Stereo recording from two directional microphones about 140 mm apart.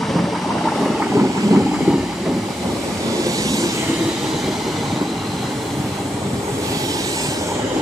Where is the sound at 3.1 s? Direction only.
25° right (ahead or behind).